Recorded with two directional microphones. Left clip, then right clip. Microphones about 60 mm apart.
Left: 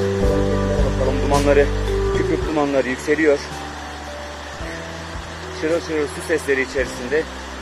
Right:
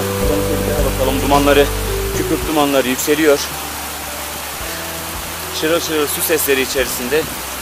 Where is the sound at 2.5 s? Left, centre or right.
Right.